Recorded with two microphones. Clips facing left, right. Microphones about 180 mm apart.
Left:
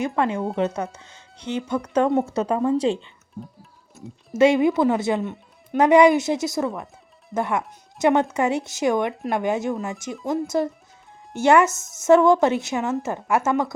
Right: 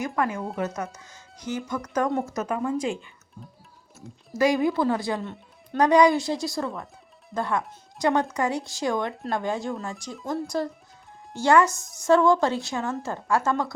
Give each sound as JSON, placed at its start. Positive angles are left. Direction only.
{"t": 0.0, "sound": "speech", "side_deg": 25}